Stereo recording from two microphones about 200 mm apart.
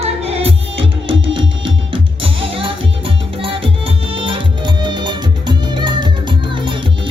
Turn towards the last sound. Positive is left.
turn(degrees=-25)  # may be behind; listen again after turning